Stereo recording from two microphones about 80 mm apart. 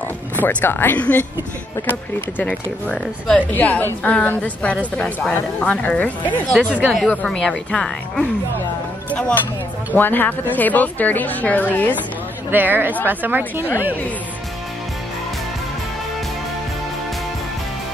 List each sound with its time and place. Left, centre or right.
0.4 s speech: left
7.2 s speech: centre
9.9 s speech: left
12.4 s a woman's voice: right